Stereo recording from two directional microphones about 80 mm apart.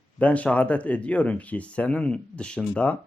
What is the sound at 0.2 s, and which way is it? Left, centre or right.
Speech, centre.